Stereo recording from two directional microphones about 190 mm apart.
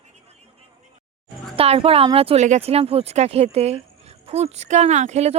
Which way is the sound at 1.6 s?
30° right (ahead or behind).